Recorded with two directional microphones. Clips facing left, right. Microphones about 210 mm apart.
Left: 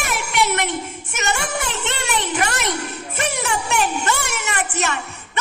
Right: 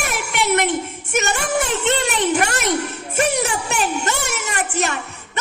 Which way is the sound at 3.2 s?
40° right (ahead or behind).